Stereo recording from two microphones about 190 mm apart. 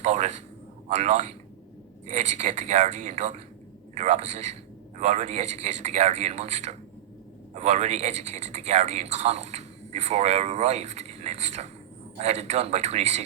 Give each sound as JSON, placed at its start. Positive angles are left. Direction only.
{"t": 0.0, "sound": "a man's voice", "side_deg": -35}